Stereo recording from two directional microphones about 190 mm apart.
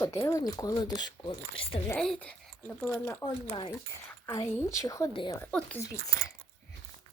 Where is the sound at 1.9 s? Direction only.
5° left (ahead or behind).